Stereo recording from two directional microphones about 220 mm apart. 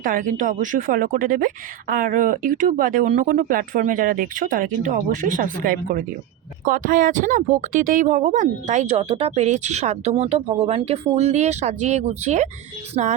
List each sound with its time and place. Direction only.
0.0 s speech: 40° right (ahead or behind)